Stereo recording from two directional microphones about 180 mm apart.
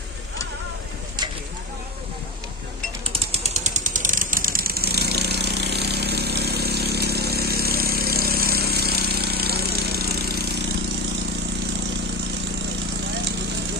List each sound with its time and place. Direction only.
3.1 s vehicle: 35° right (ahead or behind); by 10.6 s 60° right (ahead or behind)